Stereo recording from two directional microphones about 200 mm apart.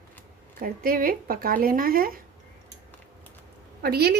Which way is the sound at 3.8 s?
50° right (ahead or behind).